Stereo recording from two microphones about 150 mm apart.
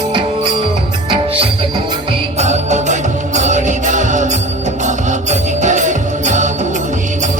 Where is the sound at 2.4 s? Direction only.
50° right (ahead or behind).